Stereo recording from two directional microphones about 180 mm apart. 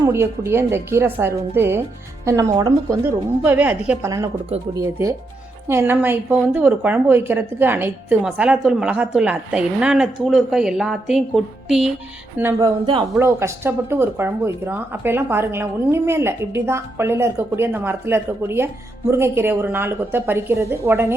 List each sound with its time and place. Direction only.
0.0 s a woman's voice: 15° right (ahead or behind)
12.4 s speech: 20° right (ahead or behind)
13.1 s a woman's voice: 15° right (ahead or behind)